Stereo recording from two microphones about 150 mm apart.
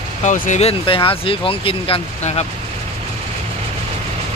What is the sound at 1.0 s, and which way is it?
Speech, 35° left (ahead or behind).